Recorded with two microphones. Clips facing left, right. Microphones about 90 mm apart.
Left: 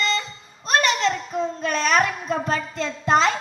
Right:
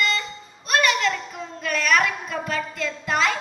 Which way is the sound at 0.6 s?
30° left (ahead or behind).